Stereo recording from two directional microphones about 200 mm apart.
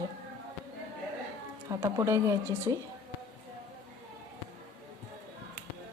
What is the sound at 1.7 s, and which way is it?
A woman's voice, 15° right (ahead or behind).